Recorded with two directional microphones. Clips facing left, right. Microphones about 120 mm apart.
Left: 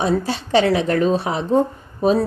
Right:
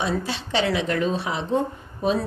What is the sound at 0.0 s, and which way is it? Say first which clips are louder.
Speech: left 6 dB; 40° left (ahead or behind).